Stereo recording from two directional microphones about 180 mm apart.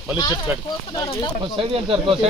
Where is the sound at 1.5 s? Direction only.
30° right (ahead or behind).